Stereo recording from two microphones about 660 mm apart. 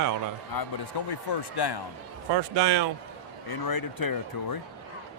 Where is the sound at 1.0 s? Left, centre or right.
Left.